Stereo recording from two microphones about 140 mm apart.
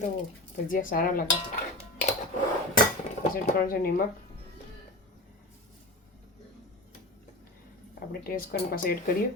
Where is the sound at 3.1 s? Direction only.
55° left (ahead or behind).